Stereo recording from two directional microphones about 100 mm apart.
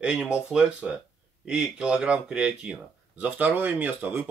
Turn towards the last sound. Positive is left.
turn(degrees=-20)  # may be behind; listen again after turning